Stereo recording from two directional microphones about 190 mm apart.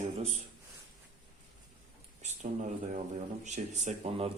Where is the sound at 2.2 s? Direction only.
40° right (ahead or behind).